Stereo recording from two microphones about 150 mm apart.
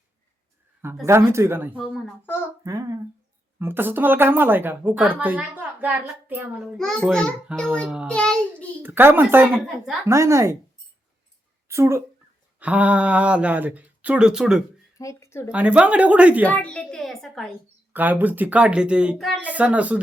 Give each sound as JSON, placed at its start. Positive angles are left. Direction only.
{"t": 0.8, "sound": "a woman's voice", "side_deg": -15}
{"t": 6.7, "sound": "a woman's voice", "side_deg": 5}
{"t": 8.8, "sound": "a woman's voice", "side_deg": -15}
{"t": 11.7, "sound": "a woman's voice", "side_deg": -15}
{"t": 14.9, "sound": "speech", "side_deg": 20}
{"t": 15.5, "sound": "a woman's voice", "side_deg": -10}
{"t": 16.5, "sound": "a woman's voice", "side_deg": 5}
{"t": 17.9, "sound": "a woman's voice", "side_deg": -10}